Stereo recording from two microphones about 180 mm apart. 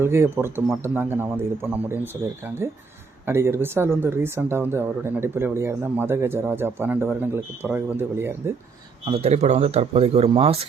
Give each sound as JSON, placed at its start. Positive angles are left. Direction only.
{"t": 0.0, "sound": "speech", "side_deg": -15}
{"t": 3.2, "sound": "speech", "side_deg": -15}
{"t": 9.0, "sound": "speech", "side_deg": -35}